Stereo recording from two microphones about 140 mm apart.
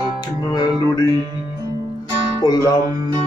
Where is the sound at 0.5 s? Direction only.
30° left (ahead or behind).